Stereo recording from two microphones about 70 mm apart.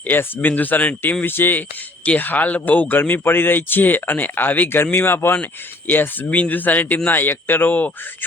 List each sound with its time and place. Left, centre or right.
0.1 s speech: left